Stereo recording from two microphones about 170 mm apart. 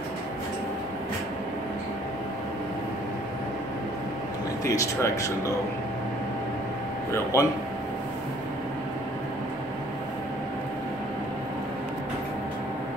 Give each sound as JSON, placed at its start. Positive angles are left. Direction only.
{"t": 4.6, "sound": "speech", "side_deg": 15}
{"t": 7.3, "sound": "speech", "side_deg": 20}